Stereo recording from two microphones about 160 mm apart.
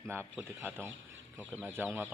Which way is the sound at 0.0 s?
15° right (ahead or behind).